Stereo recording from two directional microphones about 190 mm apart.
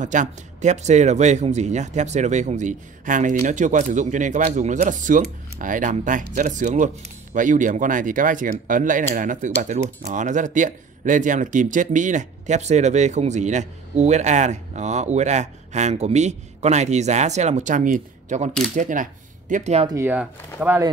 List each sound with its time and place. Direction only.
0.0 s speech: 40° right (ahead or behind)
19.9 s speech: 10° right (ahead or behind)